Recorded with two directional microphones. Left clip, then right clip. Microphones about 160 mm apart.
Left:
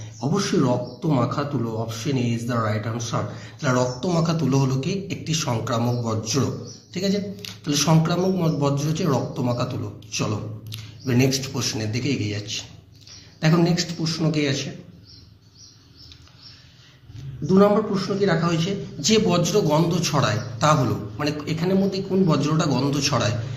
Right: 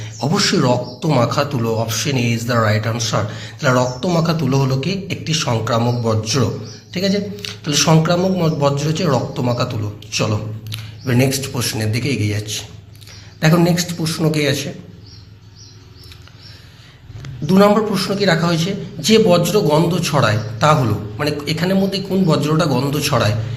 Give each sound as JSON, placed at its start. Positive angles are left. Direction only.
{"t": 0.0, "sound": "a man's voice", "side_deg": -15}
{"t": 13.4, "sound": "a man's voice", "side_deg": -5}
{"t": 17.4, "sound": "a man's voice", "side_deg": -15}
{"t": 18.9, "sound": "a man's voice", "side_deg": 0}